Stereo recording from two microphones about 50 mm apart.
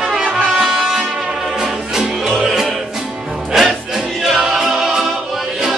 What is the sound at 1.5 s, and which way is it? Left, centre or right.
Music, centre.